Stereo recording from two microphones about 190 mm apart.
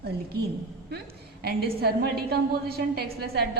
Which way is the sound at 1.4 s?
55° right (ahead or behind).